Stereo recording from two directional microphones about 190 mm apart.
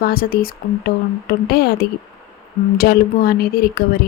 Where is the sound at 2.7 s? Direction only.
55° left (ahead or behind).